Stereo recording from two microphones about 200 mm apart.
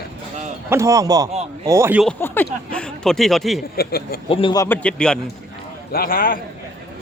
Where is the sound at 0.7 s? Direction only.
15° right (ahead or behind).